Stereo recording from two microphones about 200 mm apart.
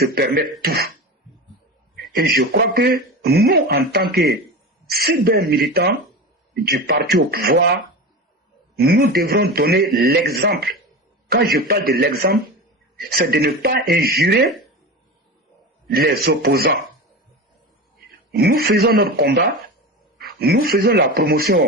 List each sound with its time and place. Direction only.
0.0 s speech: 50° right (ahead or behind)
2.1 s speech: 50° right (ahead or behind)
8.7 s a man's voice: 50° right (ahead or behind)
15.9 s speech: 50° right (ahead or behind)
18.3 s speech: 50° right (ahead or behind)